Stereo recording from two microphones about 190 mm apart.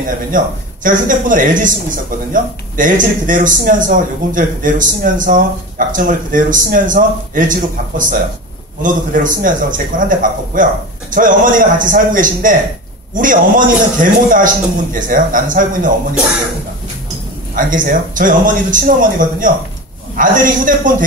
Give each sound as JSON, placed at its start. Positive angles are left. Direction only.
{"t": 0.3, "sound": "speech", "side_deg": -45}
{"t": 8.8, "sound": "speech", "side_deg": -45}
{"t": 17.6, "sound": "speech", "side_deg": -45}